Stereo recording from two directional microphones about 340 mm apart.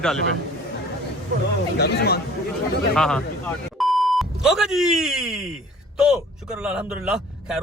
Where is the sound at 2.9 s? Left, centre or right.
Centre.